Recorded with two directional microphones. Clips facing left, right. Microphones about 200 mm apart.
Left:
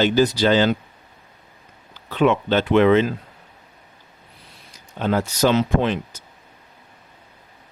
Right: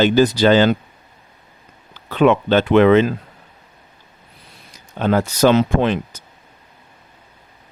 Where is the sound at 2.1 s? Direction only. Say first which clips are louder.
Right 4 dB; 65° right (ahead or behind).